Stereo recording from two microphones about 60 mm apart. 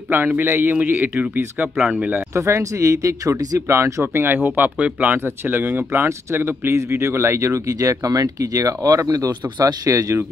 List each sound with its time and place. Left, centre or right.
0.4 s speech: right
2.3 s speech: right
4.1 s speech: right
5.2 s speech: right